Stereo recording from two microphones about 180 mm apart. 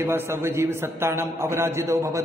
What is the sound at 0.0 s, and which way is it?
A man's voice, 15° right (ahead or behind).